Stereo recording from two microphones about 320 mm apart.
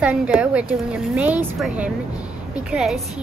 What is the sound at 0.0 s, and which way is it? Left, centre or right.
Speech, centre.